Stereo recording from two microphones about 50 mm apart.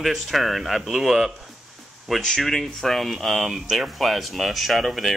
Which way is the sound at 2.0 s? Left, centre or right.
Centre.